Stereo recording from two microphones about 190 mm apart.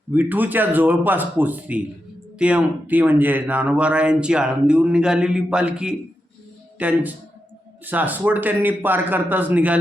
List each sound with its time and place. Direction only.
0.1 s speech: 10° right (ahead or behind)